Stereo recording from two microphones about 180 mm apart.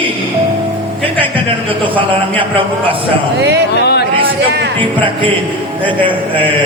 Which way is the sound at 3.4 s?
70° right (ahead or behind).